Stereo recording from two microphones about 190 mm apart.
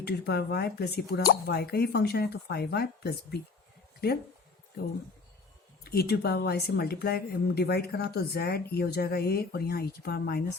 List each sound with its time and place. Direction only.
0.0 s a woman's voice: 55° left (ahead or behind)
5.8 s a woman's voice: 55° left (ahead or behind)